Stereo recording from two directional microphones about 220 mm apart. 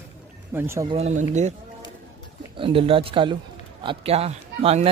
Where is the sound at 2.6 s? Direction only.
25° right (ahead or behind).